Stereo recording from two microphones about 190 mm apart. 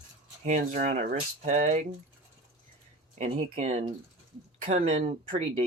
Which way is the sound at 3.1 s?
35° right (ahead or behind).